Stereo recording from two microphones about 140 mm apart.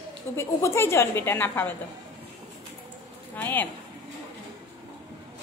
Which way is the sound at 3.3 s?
15° left (ahead or behind).